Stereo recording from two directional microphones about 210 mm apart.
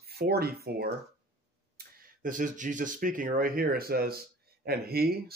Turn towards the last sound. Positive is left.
turn(degrees=-45)  # may be behind; listen again after turning